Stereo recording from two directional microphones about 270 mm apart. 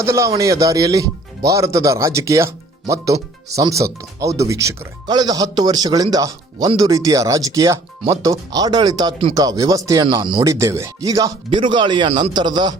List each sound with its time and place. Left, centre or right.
0.0 s speech: centre